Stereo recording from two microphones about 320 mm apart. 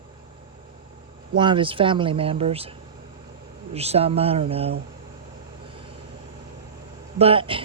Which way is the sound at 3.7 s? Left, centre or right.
Centre.